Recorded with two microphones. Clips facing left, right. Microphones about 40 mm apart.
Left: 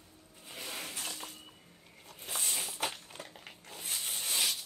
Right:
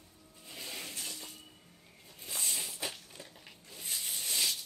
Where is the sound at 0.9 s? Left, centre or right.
Left.